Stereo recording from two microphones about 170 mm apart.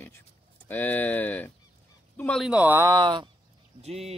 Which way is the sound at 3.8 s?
40° right (ahead or behind).